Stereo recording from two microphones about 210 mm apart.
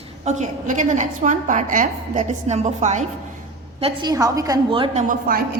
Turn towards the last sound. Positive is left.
turn(degrees=-40)  # may be behind; listen again after turning